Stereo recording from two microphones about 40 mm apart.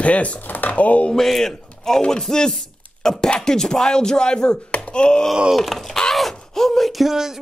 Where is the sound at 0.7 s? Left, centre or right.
Left.